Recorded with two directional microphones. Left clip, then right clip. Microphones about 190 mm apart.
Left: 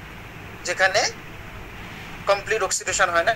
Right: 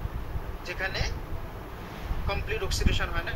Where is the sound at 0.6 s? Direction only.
30° left (ahead or behind).